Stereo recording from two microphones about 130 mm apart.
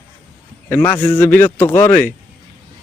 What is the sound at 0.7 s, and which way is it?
Speech, 15° left (ahead or behind).